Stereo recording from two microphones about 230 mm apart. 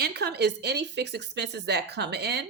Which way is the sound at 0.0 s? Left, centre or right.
Right.